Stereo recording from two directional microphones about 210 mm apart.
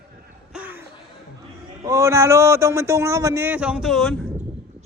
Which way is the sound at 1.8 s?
15° right (ahead or behind).